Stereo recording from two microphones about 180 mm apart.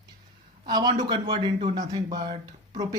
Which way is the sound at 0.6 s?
25° right (ahead or behind).